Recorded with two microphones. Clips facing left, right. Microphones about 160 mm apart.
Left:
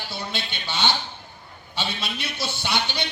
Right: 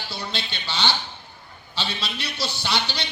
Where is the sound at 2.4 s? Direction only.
15° left (ahead or behind).